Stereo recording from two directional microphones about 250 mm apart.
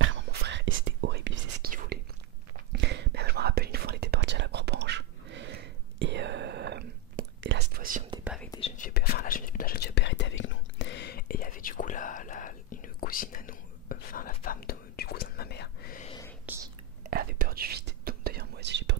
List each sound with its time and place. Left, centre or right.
0.0 s whispering: right
8.2 s whispering: centre
8.5 s whispering: left
16.1 s whispering: centre
17.0 s whispering: right